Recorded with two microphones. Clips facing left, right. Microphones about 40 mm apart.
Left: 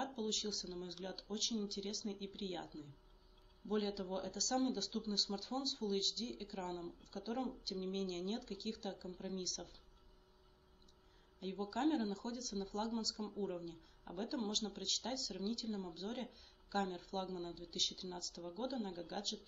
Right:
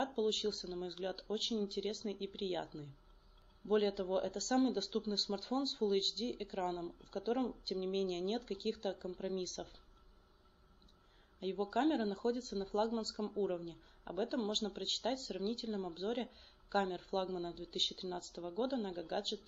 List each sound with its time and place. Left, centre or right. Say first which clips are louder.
0.0 s speech: right 6 dB; right
11.3 s speech: right 5 dB; right